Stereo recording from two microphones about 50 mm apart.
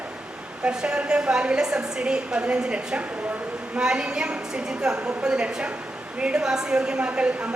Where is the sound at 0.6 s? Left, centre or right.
Centre.